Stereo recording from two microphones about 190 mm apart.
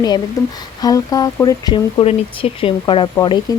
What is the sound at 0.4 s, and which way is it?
Speech, 15° left (ahead or behind).